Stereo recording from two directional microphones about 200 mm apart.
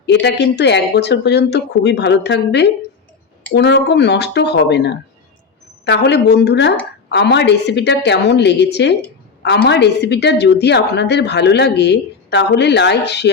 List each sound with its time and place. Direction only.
0.0 s a woman's voice: 60° left (ahead or behind)